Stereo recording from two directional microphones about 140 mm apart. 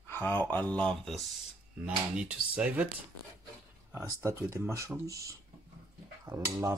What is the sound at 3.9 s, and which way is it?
Speech, 20° right (ahead or behind).